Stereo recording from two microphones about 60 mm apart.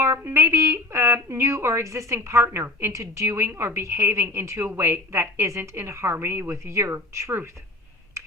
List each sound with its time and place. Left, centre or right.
0.0 s a woman's voice: right